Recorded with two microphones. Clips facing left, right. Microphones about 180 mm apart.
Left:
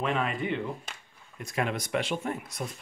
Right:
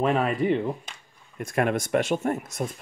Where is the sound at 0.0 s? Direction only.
45° right (ahead or behind).